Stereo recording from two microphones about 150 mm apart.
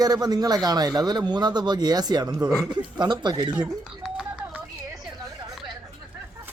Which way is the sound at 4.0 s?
5° right (ahead or behind).